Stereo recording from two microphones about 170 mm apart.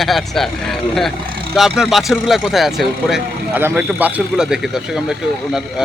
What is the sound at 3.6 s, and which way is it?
A man's voice, 10° right (ahead or behind).